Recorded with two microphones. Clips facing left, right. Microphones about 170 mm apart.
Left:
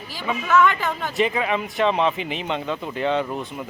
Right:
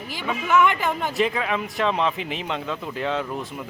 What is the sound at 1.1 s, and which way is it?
Speech, centre (ahead or behind).